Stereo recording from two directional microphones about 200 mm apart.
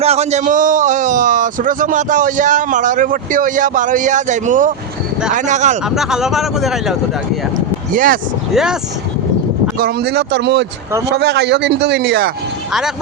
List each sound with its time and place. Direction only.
0.0 s a man's voice: 30° right (ahead or behind)
5.9 s speech: centre (ahead or behind)
7.9 s speech: 45° right (ahead or behind)
9.7 s a man's voice: 50° right (ahead or behind)